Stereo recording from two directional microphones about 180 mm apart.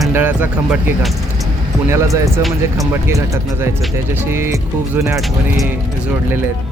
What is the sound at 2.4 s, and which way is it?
Speech, centre (ahead or behind).